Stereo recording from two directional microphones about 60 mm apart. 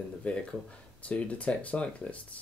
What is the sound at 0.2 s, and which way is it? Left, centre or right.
Speech, centre.